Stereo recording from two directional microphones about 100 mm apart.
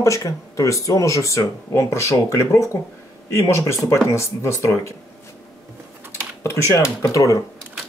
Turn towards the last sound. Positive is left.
turn(degrees=35)  # may be behind; listen again after turning